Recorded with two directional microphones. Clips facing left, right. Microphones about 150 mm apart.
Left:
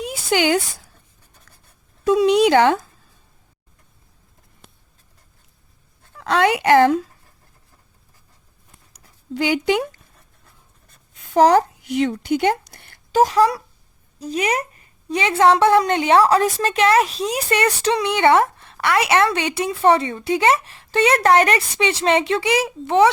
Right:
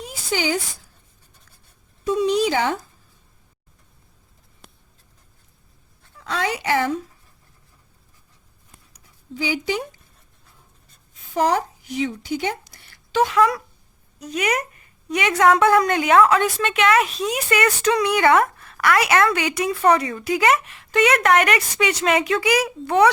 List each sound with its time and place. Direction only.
0.0 s a sound: 70° left (ahead or behind)
2.0 s speech: 80° left; by 2.8 s 65° left (ahead or behind)
6.0 s speech: 65° left (ahead or behind)
9.3 s speech: 65° left (ahead or behind)
10.8 s a sound: 70° left (ahead or behind)
13.2 s a woman's voice: 35° left (ahead or behind)